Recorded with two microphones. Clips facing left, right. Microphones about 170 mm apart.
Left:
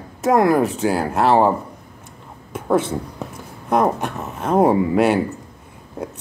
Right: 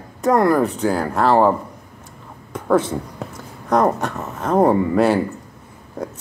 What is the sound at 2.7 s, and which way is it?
Speech, 20° left (ahead or behind).